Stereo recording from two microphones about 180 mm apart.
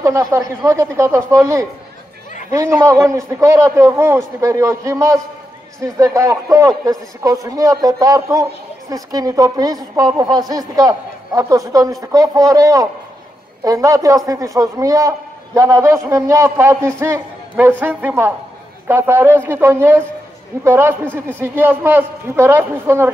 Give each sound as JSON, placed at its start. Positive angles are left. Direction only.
{"t": 0.0, "sound": "a man's voice", "side_deg": -15}